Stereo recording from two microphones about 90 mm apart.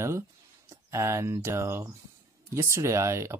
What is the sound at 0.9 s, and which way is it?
Speech, 30° right (ahead or behind).